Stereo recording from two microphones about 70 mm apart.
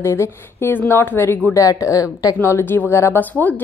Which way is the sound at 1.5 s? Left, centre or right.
Left.